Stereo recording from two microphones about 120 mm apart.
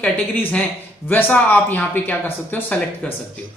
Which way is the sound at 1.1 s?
15° left (ahead or behind).